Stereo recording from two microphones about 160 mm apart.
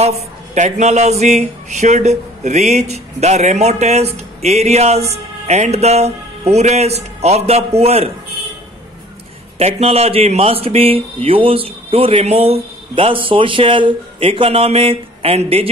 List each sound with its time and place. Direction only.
0.0 s speech: 45° right (ahead or behind)
9.6 s speech: 40° right (ahead or behind)